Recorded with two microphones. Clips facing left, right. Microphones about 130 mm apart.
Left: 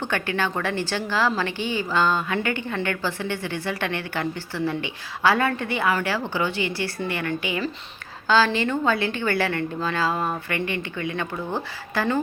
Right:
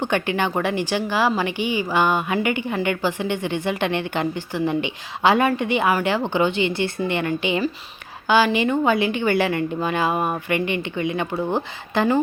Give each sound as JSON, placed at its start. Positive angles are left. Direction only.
{"t": 0.0, "sound": "a woman's voice", "side_deg": -20}